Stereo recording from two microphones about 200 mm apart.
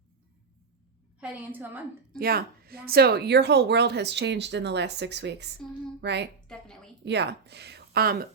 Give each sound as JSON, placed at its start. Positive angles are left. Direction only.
{"t": 1.2, "sound": "a woman's voice", "side_deg": -10}
{"t": 2.1, "sound": "a woman's voice", "side_deg": -50}
{"t": 6.5, "sound": "a sound", "side_deg": 5}
{"t": 7.0, "sound": "speech", "side_deg": -55}